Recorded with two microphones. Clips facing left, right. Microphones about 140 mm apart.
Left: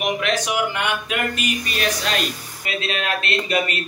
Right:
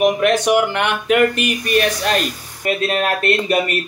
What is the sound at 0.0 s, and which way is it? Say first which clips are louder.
Speech: right 8 dB; 50° right (ahead or behind).